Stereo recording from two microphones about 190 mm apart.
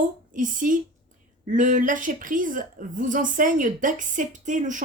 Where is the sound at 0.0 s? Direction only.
45° right (ahead or behind).